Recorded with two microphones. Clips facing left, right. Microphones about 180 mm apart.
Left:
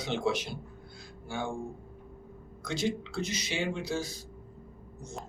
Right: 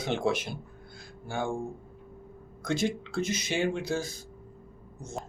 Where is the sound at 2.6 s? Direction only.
50° right (ahead or behind).